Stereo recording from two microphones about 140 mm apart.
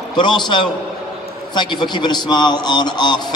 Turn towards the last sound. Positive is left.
turn(degrees=30)  # may be behind; listen again after turning